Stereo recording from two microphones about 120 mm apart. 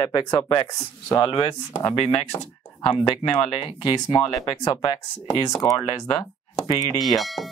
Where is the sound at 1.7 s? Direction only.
50° left (ahead or behind).